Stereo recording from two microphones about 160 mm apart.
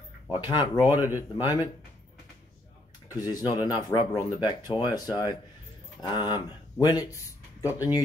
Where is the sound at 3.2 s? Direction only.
25° left (ahead or behind).